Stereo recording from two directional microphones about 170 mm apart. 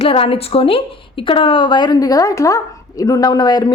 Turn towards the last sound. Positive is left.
turn(degrees=25)  # may be behind; listen again after turning